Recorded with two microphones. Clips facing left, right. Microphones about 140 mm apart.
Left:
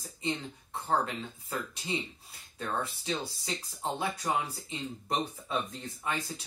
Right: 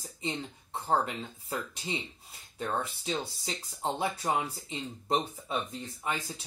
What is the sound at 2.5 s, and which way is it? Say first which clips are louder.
Speech: right 1 dB; 25° right (ahead or behind).